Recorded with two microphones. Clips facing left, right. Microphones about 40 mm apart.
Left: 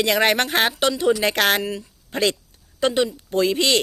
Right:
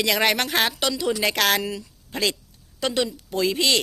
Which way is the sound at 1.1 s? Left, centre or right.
Centre.